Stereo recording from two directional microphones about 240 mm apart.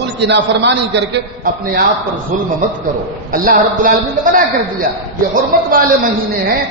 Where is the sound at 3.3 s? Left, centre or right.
Right.